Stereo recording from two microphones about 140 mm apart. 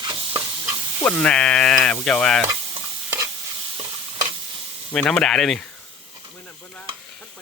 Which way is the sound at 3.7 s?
40° right (ahead or behind).